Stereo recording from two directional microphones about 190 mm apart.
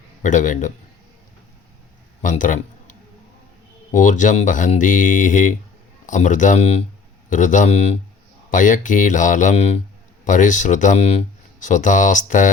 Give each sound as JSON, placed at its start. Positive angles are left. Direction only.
{"t": 0.2, "sound": "speech", "side_deg": 40}
{"t": 2.2, "sound": "a sound", "side_deg": 45}
{"t": 3.9, "sound": "speech", "side_deg": 40}